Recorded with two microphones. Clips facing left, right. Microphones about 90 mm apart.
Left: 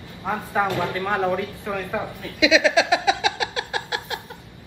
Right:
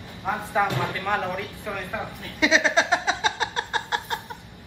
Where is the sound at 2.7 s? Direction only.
65° left (ahead or behind).